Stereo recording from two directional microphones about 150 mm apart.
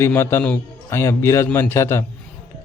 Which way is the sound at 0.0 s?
15° left (ahead or behind).